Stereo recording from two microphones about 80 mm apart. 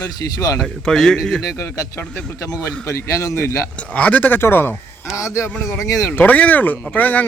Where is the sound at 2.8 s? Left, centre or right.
Left.